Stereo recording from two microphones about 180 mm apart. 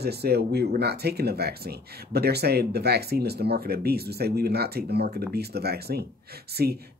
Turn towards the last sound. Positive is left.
turn(degrees=-60)  # may be behind; listen again after turning